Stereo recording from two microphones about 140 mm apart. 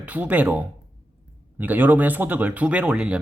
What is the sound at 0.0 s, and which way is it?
Speech, 10° right (ahead or behind).